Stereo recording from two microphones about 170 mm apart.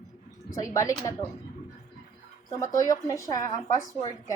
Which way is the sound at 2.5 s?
15° left (ahead or behind).